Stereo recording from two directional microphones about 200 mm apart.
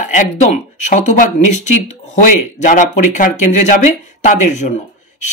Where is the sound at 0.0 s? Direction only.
40° left (ahead or behind).